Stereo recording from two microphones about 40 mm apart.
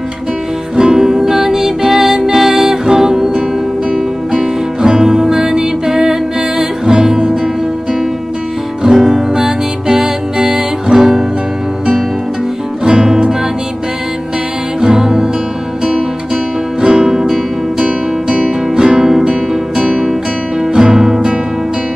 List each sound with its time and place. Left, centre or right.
0.7 s music: centre
8.8 s music: centre
12.8 s music: centre
14.8 s music: centre
16.8 s music: centre
17.8 s music: right
18.7 s music: centre